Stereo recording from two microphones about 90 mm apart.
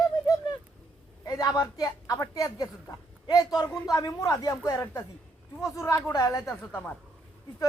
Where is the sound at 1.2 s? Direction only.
45° left (ahead or behind).